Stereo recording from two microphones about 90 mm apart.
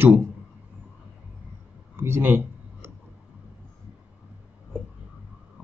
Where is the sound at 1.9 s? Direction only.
25° right (ahead or behind).